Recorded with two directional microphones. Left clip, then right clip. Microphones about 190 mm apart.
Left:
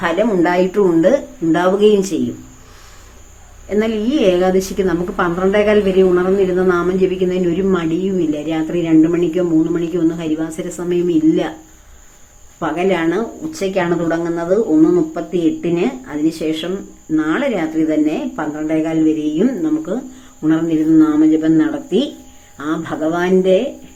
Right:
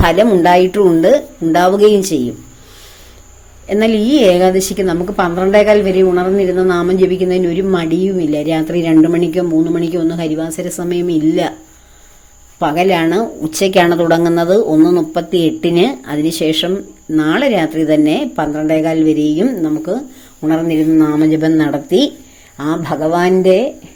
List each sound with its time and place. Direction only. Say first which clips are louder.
0.0 s a woman's voice: right 5 dB; 45° right (ahead or behind); by 2.1 s 30° right (ahead or behind)
3.7 s a woman's voice: right 5 dB; 35° right (ahead or behind)
12.5 s a woman's voice: right 5 dB; 40° right (ahead or behind)